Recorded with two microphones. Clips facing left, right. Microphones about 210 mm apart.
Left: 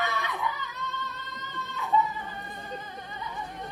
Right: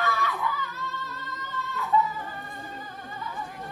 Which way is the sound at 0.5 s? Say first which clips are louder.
Right 2 dB; centre (ahead or behind).